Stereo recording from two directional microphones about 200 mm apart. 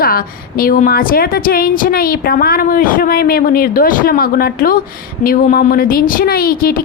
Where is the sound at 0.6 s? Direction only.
45° left (ahead or behind).